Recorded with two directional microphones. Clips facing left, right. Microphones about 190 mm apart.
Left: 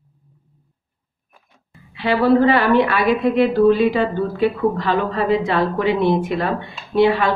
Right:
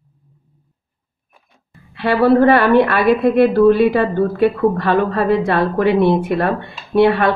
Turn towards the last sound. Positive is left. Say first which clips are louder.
# right 2 dB
turn(degrees=-55)  # may be behind; listen again after turning